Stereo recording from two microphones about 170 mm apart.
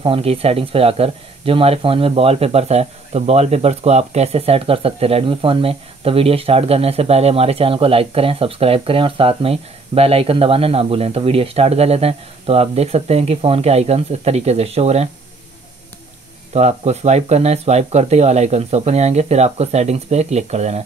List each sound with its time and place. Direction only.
0.0 s speech: 35° right (ahead or behind)
16.5 s speech: 40° right (ahead or behind)